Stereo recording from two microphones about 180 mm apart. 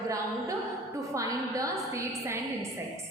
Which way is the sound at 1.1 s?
15° right (ahead or behind).